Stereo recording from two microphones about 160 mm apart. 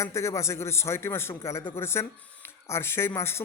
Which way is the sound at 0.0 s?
20° left (ahead or behind).